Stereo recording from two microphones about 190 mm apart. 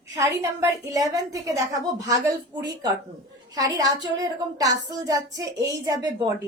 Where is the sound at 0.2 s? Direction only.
15° right (ahead or behind).